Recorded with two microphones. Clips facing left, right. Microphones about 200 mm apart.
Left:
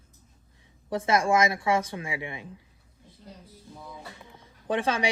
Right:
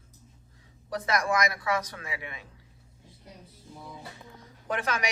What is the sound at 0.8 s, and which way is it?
Speech, 25° left (ahead or behind).